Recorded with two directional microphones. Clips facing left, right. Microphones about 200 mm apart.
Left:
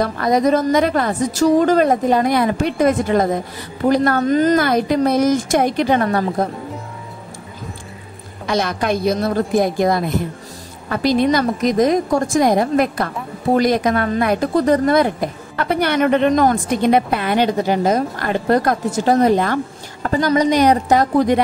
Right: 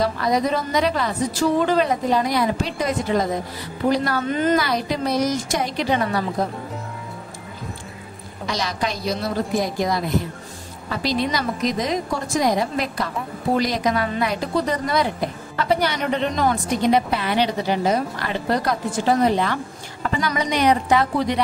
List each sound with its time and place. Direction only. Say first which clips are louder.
0.0 s a woman's voice: left 4 dB; 50° left (ahead or behind)
8.5 s a woman's voice: left 7 dB; 55° left (ahead or behind)